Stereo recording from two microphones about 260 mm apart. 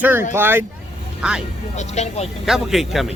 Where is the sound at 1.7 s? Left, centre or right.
Left.